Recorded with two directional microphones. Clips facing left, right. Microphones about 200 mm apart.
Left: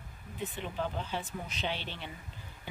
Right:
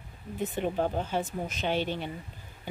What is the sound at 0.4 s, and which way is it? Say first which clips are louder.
Speech: right 7 dB; 50° right (ahead or behind).